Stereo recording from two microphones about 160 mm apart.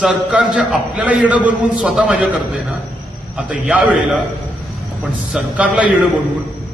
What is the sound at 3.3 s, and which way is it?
Speech, 5° right (ahead or behind).